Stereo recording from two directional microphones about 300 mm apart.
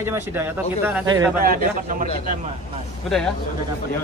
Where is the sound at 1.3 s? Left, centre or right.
Right.